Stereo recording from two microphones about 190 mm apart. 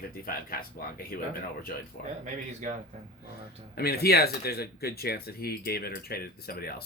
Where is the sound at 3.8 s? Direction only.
55° left (ahead or behind).